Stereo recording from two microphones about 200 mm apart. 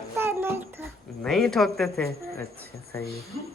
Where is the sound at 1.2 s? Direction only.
Centre (ahead or behind).